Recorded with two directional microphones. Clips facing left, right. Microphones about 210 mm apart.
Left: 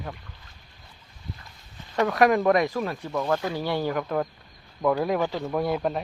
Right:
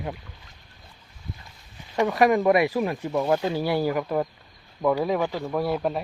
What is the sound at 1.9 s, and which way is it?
A man's voice, 5° right (ahead or behind).